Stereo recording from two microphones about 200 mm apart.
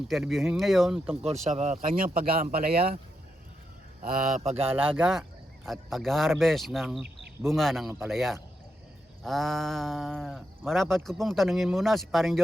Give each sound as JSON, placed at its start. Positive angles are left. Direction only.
{"t": 0.1, "sound": "speech", "side_deg": 0}
{"t": 1.2, "sound": "speech", "side_deg": -35}
{"t": 4.0, "sound": "speech", "side_deg": -35}
{"t": 4.6, "sound": "speech", "side_deg": -10}
{"t": 7.9, "sound": "speech", "side_deg": -10}
{"t": 8.1, "sound": "speech", "side_deg": 0}